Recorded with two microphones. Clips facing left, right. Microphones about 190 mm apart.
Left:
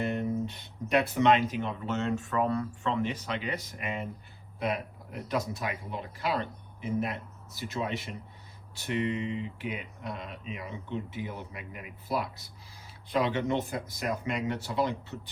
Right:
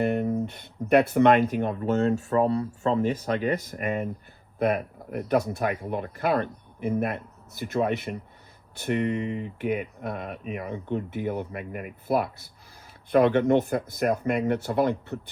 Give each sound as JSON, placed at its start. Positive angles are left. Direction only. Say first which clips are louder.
{"t": 0.0, "sound": "speech", "louder": "right 5 dB", "side_deg": -55}